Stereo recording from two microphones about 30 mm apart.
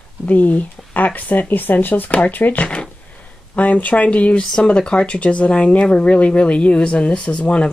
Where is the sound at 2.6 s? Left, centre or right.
Left.